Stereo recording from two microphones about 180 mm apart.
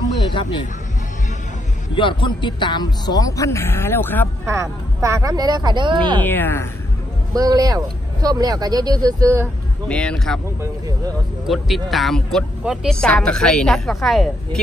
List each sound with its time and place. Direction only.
2.0 s speech: 25° left (ahead or behind); by 4.3 s 10° left (ahead or behind)
4.5 s speech: 15° right (ahead or behind)
6.2 s a woman's voice: 10° left (ahead or behind)
7.3 s speech: 20° right (ahead or behind)
9.8 s speech: 5° left (ahead or behind)
11.4 s speech: centre (ahead or behind)